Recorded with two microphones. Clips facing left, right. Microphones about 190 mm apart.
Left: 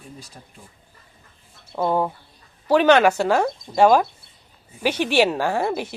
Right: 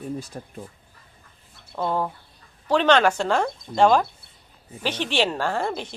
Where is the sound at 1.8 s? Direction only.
10° left (ahead or behind).